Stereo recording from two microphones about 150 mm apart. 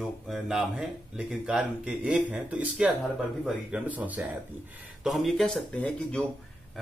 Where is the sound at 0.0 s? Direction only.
Centre (ahead or behind).